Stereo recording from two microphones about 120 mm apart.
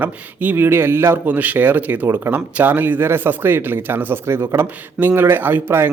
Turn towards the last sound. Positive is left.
turn(degrees=-20)  # may be behind; listen again after turning